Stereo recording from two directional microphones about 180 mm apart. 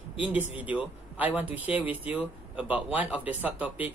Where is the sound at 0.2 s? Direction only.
10° right (ahead or behind).